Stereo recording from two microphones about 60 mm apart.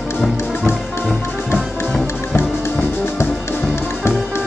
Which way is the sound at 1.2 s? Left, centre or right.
Left.